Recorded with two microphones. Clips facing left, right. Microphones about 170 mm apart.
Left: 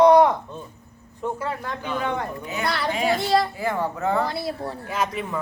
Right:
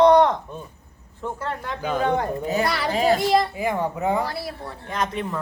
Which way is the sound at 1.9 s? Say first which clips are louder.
Right 5 dB; 40° right (ahead or behind).